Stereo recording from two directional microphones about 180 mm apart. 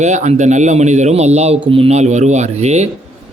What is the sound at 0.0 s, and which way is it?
Speech, 40° right (ahead or behind).